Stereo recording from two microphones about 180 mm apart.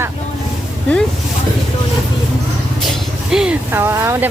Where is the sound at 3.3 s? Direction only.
5° right (ahead or behind).